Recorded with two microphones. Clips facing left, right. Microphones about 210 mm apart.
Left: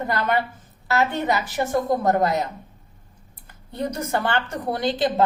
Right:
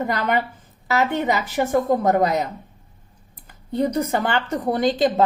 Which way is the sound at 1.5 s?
15° right (ahead or behind).